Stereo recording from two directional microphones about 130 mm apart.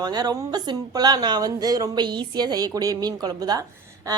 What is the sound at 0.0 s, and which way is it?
A woman's voice, 30° right (ahead or behind).